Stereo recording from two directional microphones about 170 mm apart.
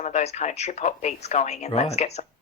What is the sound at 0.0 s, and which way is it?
A woman's voice, 40° left (ahead or behind).